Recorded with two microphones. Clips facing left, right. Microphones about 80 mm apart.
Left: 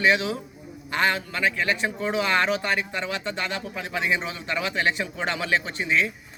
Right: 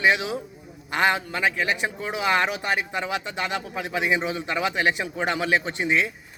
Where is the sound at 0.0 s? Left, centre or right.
Centre.